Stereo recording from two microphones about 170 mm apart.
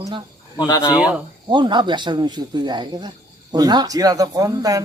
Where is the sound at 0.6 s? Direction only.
20° left (ahead or behind).